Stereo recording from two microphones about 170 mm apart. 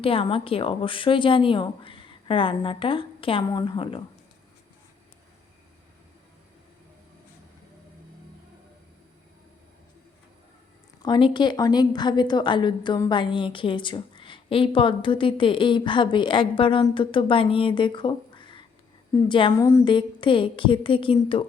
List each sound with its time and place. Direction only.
0.0 s speech: 30° left (ahead or behind)
11.0 s a woman's voice: 25° left (ahead or behind)
19.5 s speech: 15° left (ahead or behind)
19.8 s speech: 30° left (ahead or behind)